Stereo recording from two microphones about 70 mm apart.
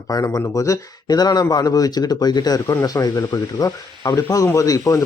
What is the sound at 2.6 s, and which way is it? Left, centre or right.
Speech, left.